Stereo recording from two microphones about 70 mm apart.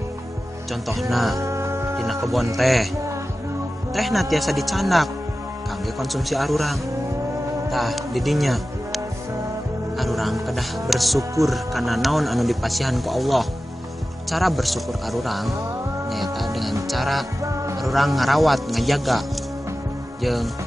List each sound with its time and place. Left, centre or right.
0.8 s speech: centre
1.4 s music: right
2.5 s speech: centre
3.9 s speech: centre
17.4 s music: right
17.8 s speech: centre